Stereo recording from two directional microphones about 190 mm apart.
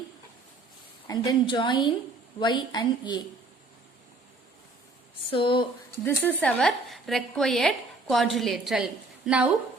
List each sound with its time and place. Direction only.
1.0 s a woman's voice: 20° left (ahead or behind)
5.3 s a woman's voice: 25° left (ahead or behind)
6.1 s a woman's voice: 10° left (ahead or behind)